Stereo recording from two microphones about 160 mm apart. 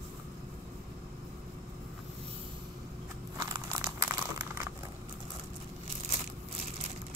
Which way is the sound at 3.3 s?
20° right (ahead or behind).